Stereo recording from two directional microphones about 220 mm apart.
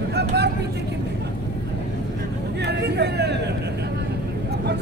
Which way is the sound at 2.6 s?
50° right (ahead or behind).